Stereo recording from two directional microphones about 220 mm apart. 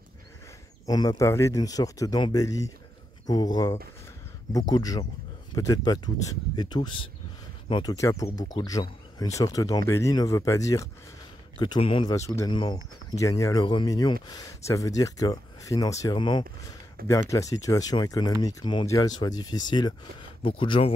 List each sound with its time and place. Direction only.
0.8 s speech: 15° left (ahead or behind)